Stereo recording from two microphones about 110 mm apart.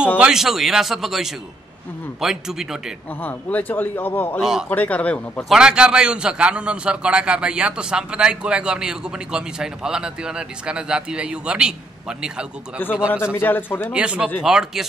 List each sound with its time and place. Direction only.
0.2 s speech: 5° right (ahead or behind)
3.2 s a man's voice: 15° left (ahead or behind)
4.4 s speech: 5° right (ahead or behind)
4.6 s a man's voice: 15° left (ahead or behind)
5.5 s a man's voice: 5° right (ahead or behind)
13.1 s a man's voice: 20° left (ahead or behind)
13.9 s a man's voice: 10° right (ahead or behind)